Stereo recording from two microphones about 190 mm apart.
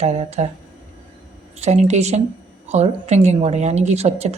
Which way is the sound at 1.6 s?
35° right (ahead or behind).